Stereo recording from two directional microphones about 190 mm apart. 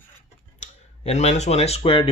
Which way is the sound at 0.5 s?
35° left (ahead or behind).